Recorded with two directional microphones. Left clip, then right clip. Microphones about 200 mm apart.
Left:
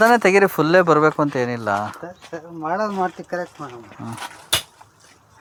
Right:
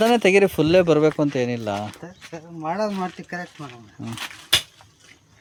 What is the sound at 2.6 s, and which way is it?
Speech, 65° right (ahead or behind).